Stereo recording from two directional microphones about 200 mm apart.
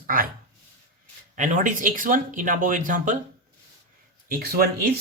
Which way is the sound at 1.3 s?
40° right (ahead or behind).